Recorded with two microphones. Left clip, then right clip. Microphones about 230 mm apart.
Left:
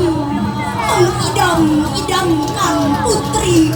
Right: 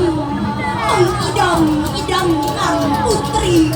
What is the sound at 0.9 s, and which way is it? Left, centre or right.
Music, left.